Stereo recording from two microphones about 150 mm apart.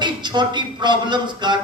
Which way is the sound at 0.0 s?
30° right (ahead or behind).